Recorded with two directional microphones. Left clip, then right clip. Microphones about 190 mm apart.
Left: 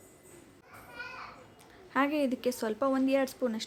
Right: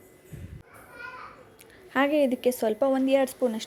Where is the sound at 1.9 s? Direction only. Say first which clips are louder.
Right 6 dB; 15° right (ahead or behind).